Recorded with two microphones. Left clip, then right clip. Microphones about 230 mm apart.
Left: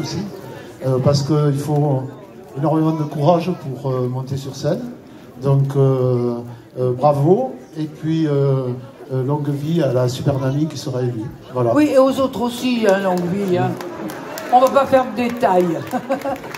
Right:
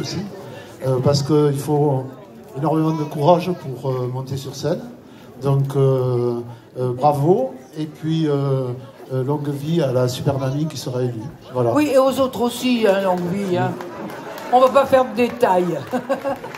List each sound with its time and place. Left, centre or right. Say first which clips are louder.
0.8 s a man's voice: left 1 dB; right